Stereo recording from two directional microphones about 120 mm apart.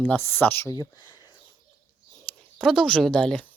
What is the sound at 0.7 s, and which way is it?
Speech, 35° left (ahead or behind).